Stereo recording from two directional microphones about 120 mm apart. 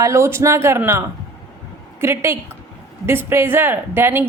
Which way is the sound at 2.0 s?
20° right (ahead or behind).